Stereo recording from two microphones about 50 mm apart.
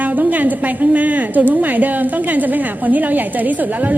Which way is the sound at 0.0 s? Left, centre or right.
Right.